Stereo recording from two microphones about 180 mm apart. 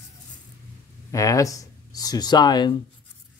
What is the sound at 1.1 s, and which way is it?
Speech, 20° left (ahead or behind).